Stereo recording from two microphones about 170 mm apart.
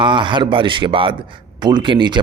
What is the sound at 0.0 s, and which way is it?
A man's voice, 30° right (ahead or behind).